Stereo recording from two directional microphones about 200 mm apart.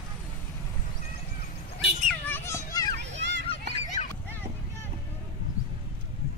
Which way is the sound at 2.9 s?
65° right (ahead or behind).